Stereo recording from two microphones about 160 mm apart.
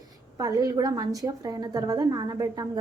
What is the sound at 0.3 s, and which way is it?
A woman's voice, 20° right (ahead or behind).